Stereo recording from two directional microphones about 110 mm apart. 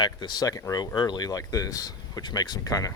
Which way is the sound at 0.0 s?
40° left (ahead or behind).